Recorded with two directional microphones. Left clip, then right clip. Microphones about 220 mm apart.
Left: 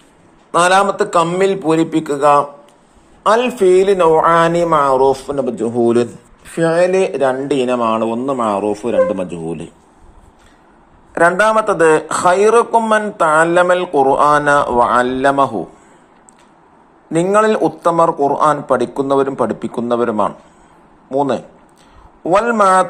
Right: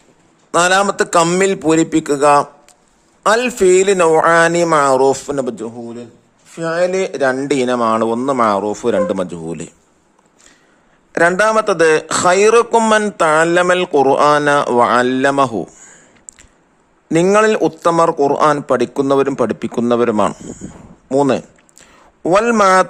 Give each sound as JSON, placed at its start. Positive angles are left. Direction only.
{"t": 0.7, "sound": "a man's voice", "side_deg": -40}
{"t": 4.0, "sound": "speech", "side_deg": -50}
{"t": 4.3, "sound": "a man's voice", "side_deg": -35}
{"t": 6.5, "sound": "speech", "side_deg": 0}
{"t": 6.7, "sound": "a man's voice", "side_deg": -15}
{"t": 11.1, "sound": "a man's voice", "side_deg": -40}
{"t": 11.6, "sound": "speech", "side_deg": -45}
{"t": 17.1, "sound": "speech", "side_deg": -50}
{"t": 22.3, "sound": "a man's voice", "side_deg": -35}